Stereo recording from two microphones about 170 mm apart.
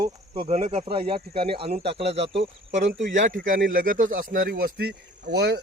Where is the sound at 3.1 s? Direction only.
50° right (ahead or behind).